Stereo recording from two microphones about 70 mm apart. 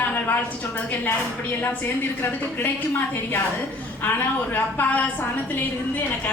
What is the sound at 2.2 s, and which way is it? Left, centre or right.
A woman's voice, left.